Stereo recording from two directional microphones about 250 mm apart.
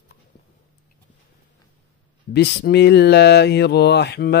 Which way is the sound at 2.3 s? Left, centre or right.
Left.